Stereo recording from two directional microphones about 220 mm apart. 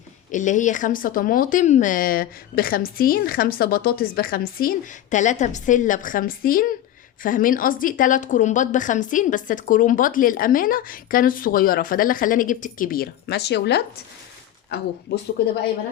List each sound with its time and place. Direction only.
0.3 s a woman's voice: 35° left (ahead or behind)